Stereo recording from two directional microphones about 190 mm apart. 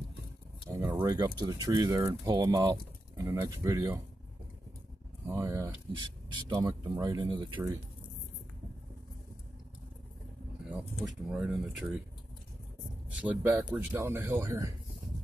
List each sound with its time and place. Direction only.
0.7 s a sound: 15° right (ahead or behind)
0.9 s speech: 20° right (ahead or behind)
5.2 s speech: 15° right (ahead or behind)
11.2 s speech: 5° right (ahead or behind)
13.2 s speech: 10° right (ahead or behind)